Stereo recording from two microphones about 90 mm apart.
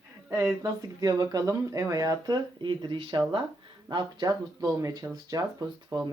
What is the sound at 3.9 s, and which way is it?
Speech, 50° right (ahead or behind).